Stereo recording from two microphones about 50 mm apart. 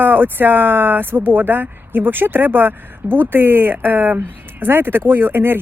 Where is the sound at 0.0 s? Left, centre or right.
Right.